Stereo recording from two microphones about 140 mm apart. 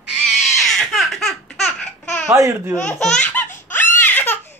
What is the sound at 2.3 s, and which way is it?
Speech, 20° right (ahead or behind).